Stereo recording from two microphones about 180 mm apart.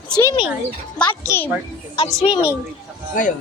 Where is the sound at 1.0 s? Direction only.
15° left (ahead or behind).